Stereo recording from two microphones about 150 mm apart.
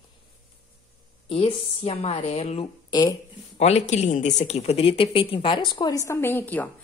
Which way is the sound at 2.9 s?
30° left (ahead or behind).